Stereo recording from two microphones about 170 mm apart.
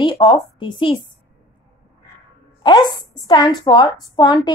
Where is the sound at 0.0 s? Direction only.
25° left (ahead or behind).